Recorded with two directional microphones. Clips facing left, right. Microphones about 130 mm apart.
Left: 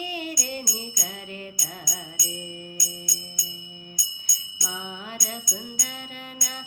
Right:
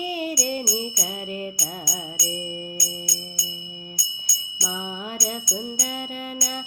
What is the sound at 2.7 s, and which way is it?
Music, 65° right (ahead or behind).